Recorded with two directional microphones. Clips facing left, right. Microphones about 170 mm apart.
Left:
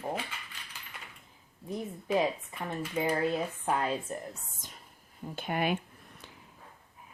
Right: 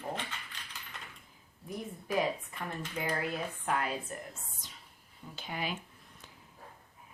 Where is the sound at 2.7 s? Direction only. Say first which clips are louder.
Left 6 dB; 25° left (ahead or behind).